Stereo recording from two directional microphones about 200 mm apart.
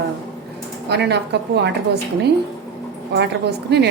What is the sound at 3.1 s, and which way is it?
Speech, 55° right (ahead or behind).